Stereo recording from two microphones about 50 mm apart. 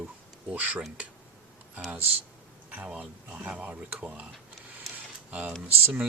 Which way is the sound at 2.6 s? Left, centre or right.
Right.